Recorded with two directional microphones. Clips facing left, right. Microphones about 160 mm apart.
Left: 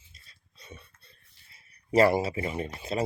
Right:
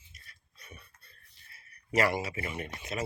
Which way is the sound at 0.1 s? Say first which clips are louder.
Right 3 dB; 25° left (ahead or behind).